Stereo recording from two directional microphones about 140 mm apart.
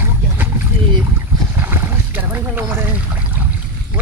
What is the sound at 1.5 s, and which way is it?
Boat, 15° right (ahead or behind).